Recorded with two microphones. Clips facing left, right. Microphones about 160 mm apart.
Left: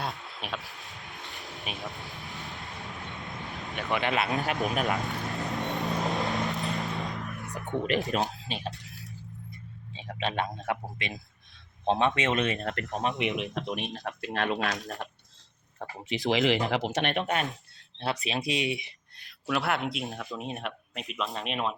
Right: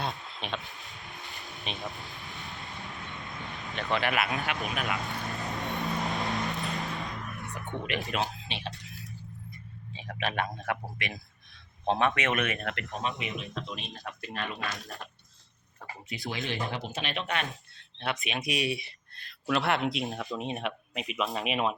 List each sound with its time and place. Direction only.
0.0 s a sound: centre (ahead or behind)
1.3 s vehicle: centre (ahead or behind)
3.9 s speech: 25° left (ahead or behind)
4.6 s speech: 40° left (ahead or behind)
4.9 s vehicle: centre (ahead or behind)
7.0 s music: centre (ahead or behind)
7.5 s speech: 40° left (ahead or behind)
9.9 s speech: 25° left (ahead or behind)
13.0 s speech: 55° left (ahead or behind)
15.8 s speech: 90° left; by 17.4 s 50° left (ahead or behind)
18.0 s speech: 35° left (ahead or behind); by 19.3 s 15° left (ahead or behind)
19.5 s speech: centre (ahead or behind)